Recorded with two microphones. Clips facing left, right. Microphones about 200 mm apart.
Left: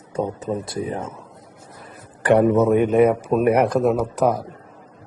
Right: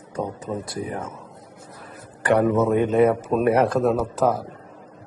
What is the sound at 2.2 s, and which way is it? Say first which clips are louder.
A man's voice: left 3 dB; 20° left (ahead or behind).